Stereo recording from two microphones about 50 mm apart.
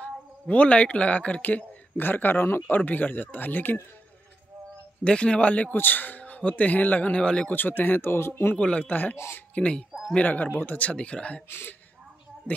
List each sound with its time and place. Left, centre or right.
0.0 s speech: left
2.0 s speech: left
5.0 s a man's voice: left
5.7 s a man's voice: left
7.5 s speech: left
8.5 s a man's voice: left
9.6 s a man's voice: centre
10.1 s a man's voice: left
11.4 s speech: left